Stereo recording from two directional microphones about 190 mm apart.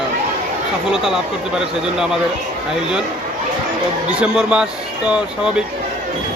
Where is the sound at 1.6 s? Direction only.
5° right (ahead or behind).